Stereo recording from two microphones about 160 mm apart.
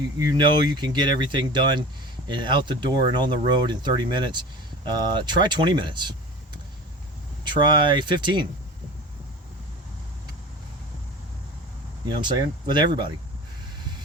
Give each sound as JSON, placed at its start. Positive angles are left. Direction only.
{"t": 0.2, "sound": "speech", "side_deg": -25}
{"t": 12.0, "sound": "speech", "side_deg": -30}